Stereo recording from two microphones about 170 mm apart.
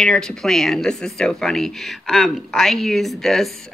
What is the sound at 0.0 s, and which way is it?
A woman's voice, 5° left (ahead or behind).